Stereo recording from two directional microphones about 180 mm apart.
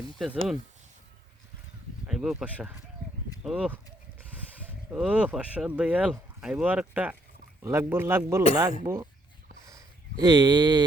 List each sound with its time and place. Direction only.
0.2 s speech: centre (ahead or behind)
2.0 s speech: 5° right (ahead or behind)
9.6 s a sound: 20° right (ahead or behind)